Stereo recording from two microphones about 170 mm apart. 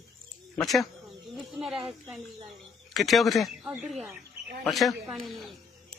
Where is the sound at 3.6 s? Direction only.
10° right (ahead or behind).